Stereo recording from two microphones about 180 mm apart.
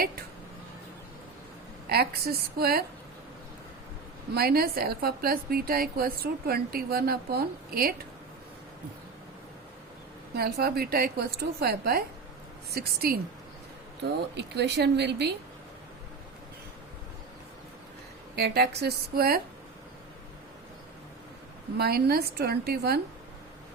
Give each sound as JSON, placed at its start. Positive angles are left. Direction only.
{"t": 1.9, "sound": "a woman's voice", "side_deg": -60}
{"t": 4.4, "sound": "a woman's voice", "side_deg": -60}
{"t": 10.3, "sound": "a woman's voice", "side_deg": -60}
{"t": 14.0, "sound": "speech", "side_deg": -70}
{"t": 18.3, "sound": "a woman's voice", "side_deg": -65}
{"t": 21.8, "sound": "a woman's voice", "side_deg": -60}